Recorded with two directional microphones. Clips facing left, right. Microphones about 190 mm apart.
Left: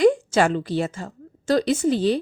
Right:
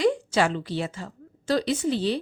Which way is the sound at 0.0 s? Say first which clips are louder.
Left 5 dB; 50° left (ahead or behind).